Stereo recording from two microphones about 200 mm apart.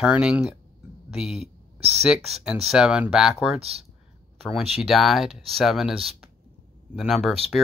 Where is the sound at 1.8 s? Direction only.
30° right (ahead or behind).